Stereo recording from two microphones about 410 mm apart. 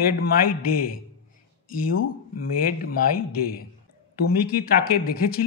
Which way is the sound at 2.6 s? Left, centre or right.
Left.